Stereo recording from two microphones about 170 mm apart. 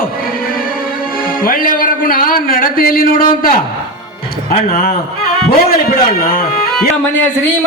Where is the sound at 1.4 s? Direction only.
55° left (ahead or behind).